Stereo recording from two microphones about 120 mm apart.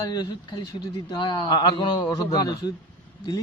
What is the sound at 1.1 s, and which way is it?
A man's voice, 40° left (ahead or behind).